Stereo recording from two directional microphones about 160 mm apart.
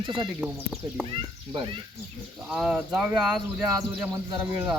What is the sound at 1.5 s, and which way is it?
Speech, 30° right (ahead or behind).